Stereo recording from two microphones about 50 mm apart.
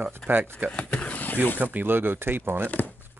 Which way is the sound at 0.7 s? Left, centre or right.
Left.